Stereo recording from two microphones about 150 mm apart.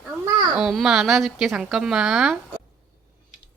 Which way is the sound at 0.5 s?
Centre (ahead or behind).